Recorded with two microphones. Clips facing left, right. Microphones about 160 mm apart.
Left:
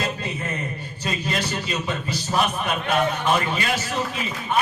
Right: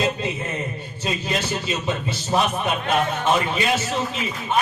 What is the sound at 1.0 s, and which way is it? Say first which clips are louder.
A man's voice: right 1 dB; 25° right (ahead or behind).